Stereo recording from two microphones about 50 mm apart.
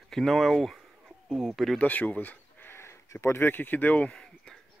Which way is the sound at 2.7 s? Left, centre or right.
Left.